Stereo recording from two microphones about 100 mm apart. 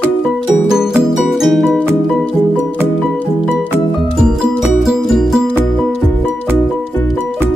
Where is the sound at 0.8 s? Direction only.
5° right (ahead or behind).